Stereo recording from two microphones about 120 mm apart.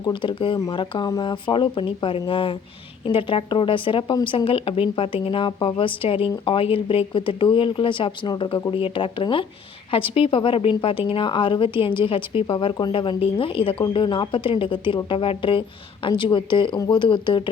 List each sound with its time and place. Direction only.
0.0 s speech: 40° left (ahead or behind)